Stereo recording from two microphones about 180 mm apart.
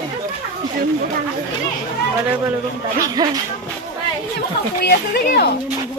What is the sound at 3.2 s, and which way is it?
Speech, 25° right (ahead or behind).